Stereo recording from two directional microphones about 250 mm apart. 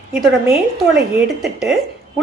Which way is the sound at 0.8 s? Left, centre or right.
Centre.